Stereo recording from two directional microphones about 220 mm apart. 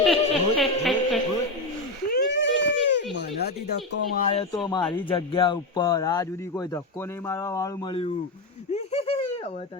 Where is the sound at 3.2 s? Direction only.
45° left (ahead or behind).